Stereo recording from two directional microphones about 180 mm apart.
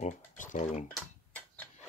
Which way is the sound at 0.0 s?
45° left (ahead or behind).